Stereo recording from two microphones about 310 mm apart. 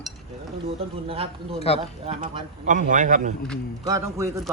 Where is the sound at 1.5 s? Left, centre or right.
Centre.